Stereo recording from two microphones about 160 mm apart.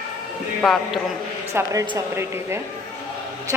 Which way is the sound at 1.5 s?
20° right (ahead or behind).